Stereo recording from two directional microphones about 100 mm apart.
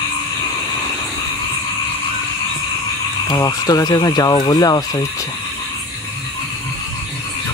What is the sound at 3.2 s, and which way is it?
Speech, 40° left (ahead or behind).